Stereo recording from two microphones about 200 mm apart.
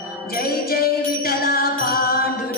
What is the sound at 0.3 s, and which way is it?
Music, 50° left (ahead or behind).